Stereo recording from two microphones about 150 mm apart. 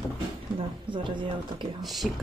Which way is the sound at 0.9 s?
30° right (ahead or behind).